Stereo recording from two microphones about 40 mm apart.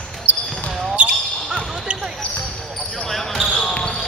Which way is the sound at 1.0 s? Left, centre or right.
Right.